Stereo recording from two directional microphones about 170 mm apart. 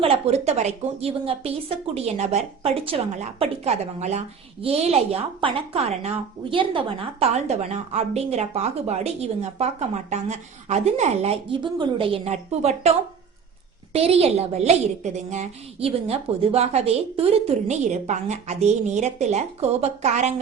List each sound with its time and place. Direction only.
0.0 s a woman's voice: 35° right (ahead or behind)
13.9 s a woman's voice: 35° right (ahead or behind)